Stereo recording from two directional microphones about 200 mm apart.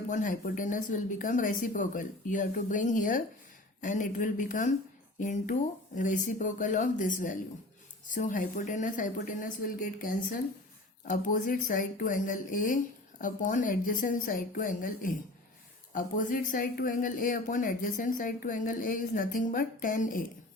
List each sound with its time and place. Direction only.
0.1 s speech: 40° left (ahead or behind)